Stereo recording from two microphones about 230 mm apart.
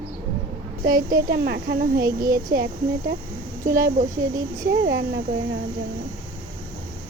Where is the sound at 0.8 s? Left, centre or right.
Right.